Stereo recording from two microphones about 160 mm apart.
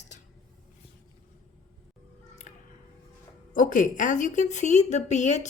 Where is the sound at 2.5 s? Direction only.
50° left (ahead or behind).